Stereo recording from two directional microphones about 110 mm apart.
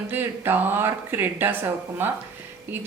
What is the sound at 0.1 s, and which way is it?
A woman's voice, 20° right (ahead or behind).